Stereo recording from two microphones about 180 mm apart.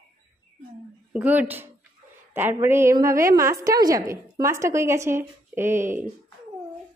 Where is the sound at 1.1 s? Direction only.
10° right (ahead or behind).